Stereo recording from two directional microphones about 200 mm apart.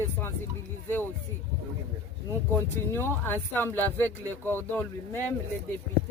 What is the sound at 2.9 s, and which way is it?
Speech, 10° left (ahead or behind).